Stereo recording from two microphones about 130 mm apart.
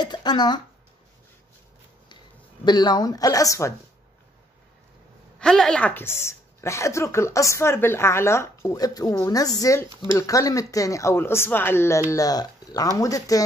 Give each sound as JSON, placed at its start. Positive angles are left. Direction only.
{"t": 0.0, "sound": "a sound", "side_deg": 35}
{"t": 2.6, "sound": "a woman's voice", "side_deg": 35}
{"t": 5.4, "sound": "a woman's voice", "side_deg": 5}